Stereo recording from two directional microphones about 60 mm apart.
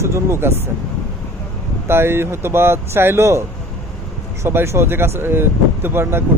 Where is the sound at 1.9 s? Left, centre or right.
Right.